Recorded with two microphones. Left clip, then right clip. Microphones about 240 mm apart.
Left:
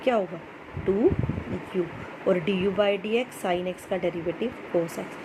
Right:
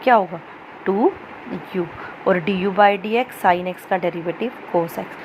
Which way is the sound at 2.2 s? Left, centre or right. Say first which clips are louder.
Right 5 dB; centre.